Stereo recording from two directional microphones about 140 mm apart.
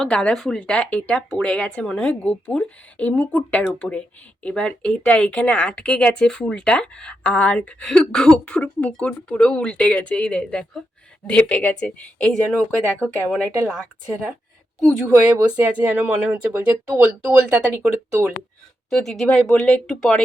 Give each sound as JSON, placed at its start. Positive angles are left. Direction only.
{"t": 0.0, "sound": "speech", "side_deg": 5}
{"t": 15.0, "sound": "speech", "side_deg": -15}
{"t": 18.9, "sound": "speech", "side_deg": 5}